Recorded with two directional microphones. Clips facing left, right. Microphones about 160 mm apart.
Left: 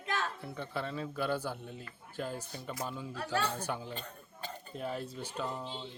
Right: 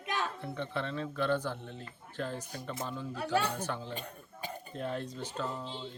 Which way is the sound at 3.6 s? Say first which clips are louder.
Right 1 dB; 10° left (ahead or behind).